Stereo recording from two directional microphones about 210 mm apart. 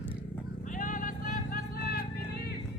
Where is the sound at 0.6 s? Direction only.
40° left (ahead or behind).